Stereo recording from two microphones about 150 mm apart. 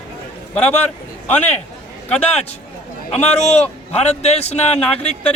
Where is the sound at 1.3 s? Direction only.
10° left (ahead or behind).